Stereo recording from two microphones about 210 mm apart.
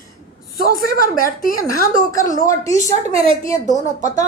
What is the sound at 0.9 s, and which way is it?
Speech, 40° left (ahead or behind).